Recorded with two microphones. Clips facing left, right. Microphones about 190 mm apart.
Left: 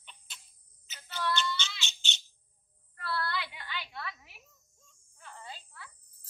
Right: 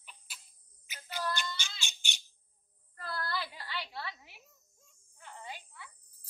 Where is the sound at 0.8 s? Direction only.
10° right (ahead or behind).